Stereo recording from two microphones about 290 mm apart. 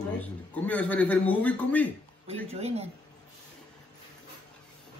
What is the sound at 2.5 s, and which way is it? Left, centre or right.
Speech, right.